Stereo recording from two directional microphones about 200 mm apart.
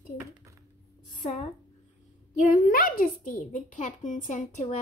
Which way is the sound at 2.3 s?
40° left (ahead or behind).